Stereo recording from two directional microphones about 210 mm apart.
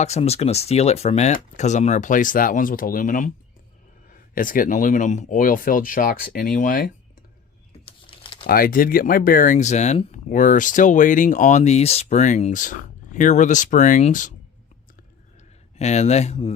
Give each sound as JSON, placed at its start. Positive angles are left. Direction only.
{"t": 0.0, "sound": "speech", "side_deg": 30}
{"t": 8.0, "sound": "typing", "side_deg": 25}
{"t": 8.4, "sound": "speech", "side_deg": 45}
{"t": 15.8, "sound": "speech", "side_deg": 30}